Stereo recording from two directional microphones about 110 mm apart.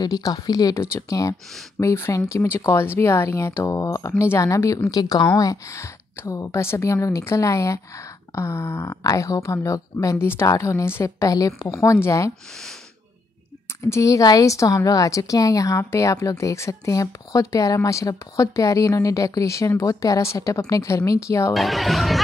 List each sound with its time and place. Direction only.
0.0 s speech: 35° left (ahead or behind)
13.8 s speech: 25° left (ahead or behind)
21.5 s speech: centre (ahead or behind)